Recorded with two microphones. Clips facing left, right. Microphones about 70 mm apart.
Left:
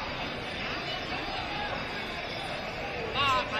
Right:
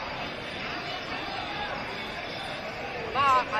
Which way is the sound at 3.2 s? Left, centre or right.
Right.